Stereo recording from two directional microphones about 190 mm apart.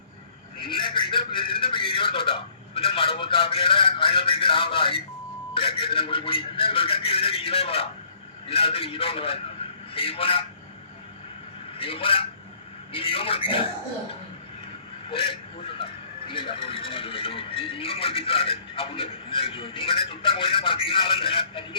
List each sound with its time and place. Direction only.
0.7 s speech: 25° left (ahead or behind)
11.8 s speech: 30° left (ahead or behind)
15.1 s speech: 25° left (ahead or behind)